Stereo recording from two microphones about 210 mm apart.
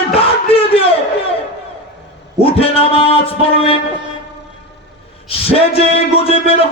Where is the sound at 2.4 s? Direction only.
25° left (ahead or behind).